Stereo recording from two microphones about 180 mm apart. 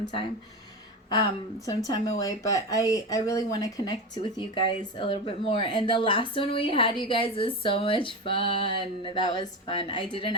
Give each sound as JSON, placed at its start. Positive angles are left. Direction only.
{"t": 0.0, "sound": "speech", "side_deg": 25}
{"t": 1.6, "sound": "speech", "side_deg": 20}